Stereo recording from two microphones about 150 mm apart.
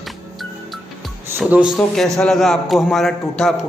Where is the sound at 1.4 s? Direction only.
Centre (ahead or behind).